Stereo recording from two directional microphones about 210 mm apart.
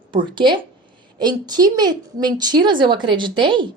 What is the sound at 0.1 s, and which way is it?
A woman's voice, 20° right (ahead or behind).